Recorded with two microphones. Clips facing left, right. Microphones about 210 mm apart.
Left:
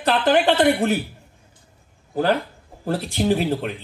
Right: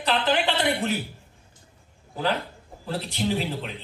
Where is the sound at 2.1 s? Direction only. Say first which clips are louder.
Left 6 dB; 50° left (ahead or behind).